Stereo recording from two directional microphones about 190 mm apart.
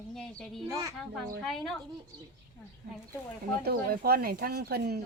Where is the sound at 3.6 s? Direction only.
55° right (ahead or behind).